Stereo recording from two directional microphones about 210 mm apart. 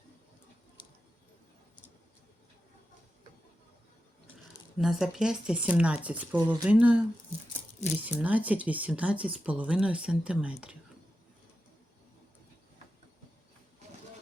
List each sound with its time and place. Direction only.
4.8 s speech: centre (ahead or behind)
6.4 s speech: 20° right (ahead or behind)
6.7 s speech: 5° right (ahead or behind)
8.2 s speech: 5° right (ahead or behind)